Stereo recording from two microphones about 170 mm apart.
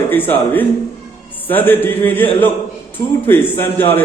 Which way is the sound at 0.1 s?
10° left (ahead or behind).